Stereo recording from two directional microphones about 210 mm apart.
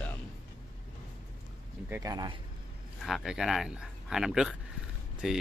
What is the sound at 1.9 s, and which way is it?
Speech, 15° right (ahead or behind).